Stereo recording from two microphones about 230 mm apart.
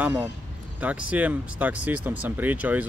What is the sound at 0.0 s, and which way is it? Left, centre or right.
Speech, centre.